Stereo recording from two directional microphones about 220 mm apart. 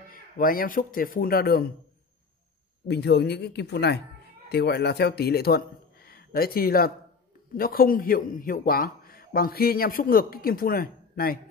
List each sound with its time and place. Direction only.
0.1 s a man's voice: 40° left (ahead or behind)
2.9 s a man's voice: 50° left (ahead or behind)